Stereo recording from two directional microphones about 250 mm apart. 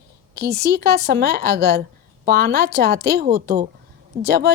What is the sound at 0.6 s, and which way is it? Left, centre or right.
A woman's voice, right.